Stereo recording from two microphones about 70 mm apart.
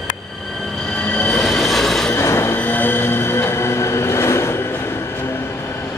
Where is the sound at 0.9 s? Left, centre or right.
Centre.